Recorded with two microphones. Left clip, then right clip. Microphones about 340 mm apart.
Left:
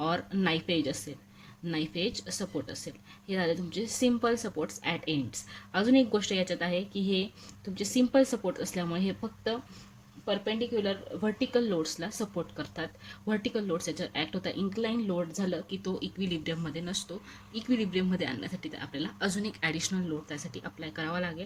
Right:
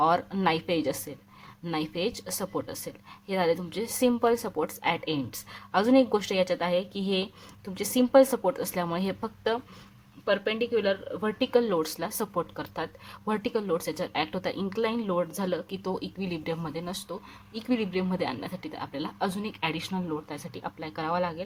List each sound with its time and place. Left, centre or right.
0.3 s speech: centre
10.2 s speech: right